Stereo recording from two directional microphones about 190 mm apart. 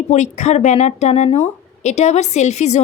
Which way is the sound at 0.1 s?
35° left (ahead or behind).